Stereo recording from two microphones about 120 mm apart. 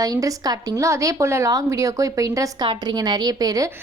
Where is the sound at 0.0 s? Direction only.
30° right (ahead or behind).